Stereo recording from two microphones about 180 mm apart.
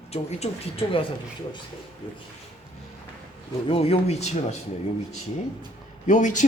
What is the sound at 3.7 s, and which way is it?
Speech, 35° left (ahead or behind).